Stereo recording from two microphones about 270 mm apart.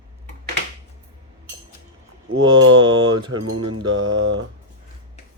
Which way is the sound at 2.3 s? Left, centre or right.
Right.